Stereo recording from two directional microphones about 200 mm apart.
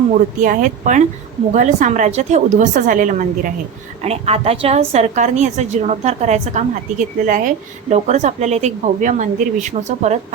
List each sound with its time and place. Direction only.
0.4 s a woman's voice: 40° right (ahead or behind)